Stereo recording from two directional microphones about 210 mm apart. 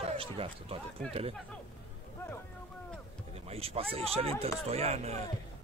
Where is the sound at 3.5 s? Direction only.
30° right (ahead or behind).